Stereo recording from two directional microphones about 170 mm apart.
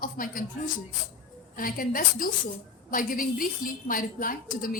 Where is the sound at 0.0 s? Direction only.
55° left (ahead or behind).